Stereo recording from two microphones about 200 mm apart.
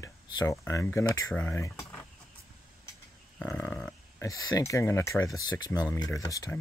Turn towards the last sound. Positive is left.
turn(degrees=15)  # may be behind; listen again after turning